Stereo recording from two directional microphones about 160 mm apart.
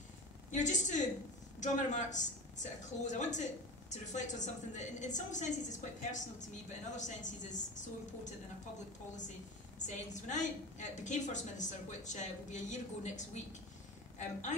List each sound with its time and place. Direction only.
0.5 s a woman's voice: 50° left (ahead or behind)
9.8 s a woman's voice: 50° left (ahead or behind)